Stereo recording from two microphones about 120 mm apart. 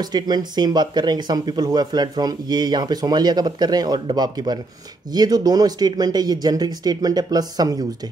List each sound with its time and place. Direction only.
0.0 s speech: 35° right (ahead or behind)